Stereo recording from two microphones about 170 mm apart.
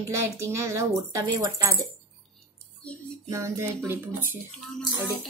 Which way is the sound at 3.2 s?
15° right (ahead or behind).